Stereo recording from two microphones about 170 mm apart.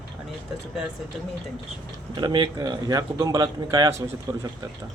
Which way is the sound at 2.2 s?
25° right (ahead or behind).